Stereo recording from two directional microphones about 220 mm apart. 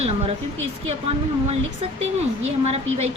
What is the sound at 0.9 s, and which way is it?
Speech, 30° right (ahead or behind).